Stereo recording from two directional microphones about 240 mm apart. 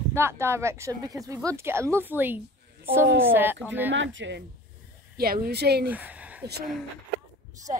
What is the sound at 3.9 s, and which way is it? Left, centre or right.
Speech, right.